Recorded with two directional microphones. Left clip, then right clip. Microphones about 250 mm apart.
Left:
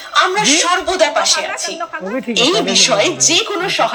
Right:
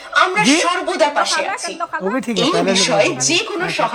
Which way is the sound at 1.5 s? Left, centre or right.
Right.